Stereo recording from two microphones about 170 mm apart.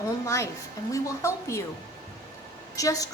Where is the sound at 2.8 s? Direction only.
20° left (ahead or behind).